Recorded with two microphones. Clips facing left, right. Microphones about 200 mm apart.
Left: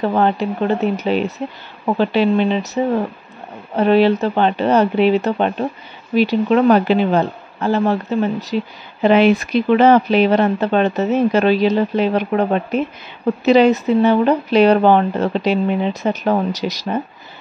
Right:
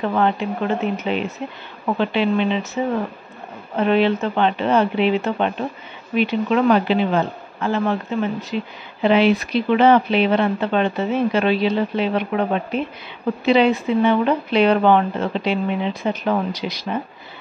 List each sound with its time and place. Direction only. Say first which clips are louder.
0.0 s speech: left 3 dB; 35° left (ahead or behind)